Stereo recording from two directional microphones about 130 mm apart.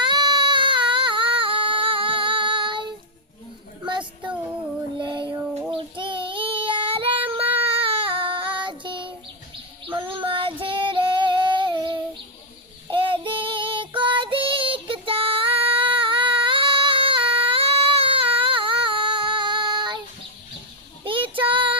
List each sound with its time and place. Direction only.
0.0 s a sound: 35° right (ahead or behind)
4.9 s child singing: 35° right (ahead or behind)
21.0 s child singing: 40° right (ahead or behind)